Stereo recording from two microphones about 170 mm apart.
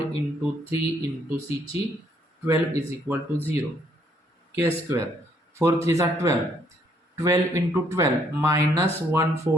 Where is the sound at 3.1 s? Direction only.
15° right (ahead or behind).